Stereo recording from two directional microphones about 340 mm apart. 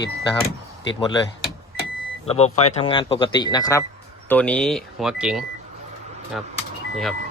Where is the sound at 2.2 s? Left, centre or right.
Centre.